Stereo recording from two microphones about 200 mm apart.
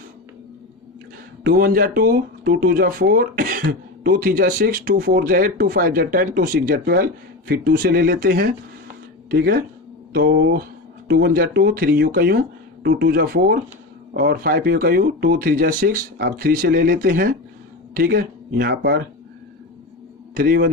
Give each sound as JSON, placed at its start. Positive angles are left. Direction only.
{"t": 1.4, "sound": "speech", "side_deg": -45}
{"t": 20.3, "sound": "a man's voice", "side_deg": -45}